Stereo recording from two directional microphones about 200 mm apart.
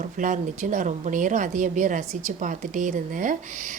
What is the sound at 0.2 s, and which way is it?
A woman's voice, 40° right (ahead or behind).